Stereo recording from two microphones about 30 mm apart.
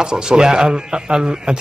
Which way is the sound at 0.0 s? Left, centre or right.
Right.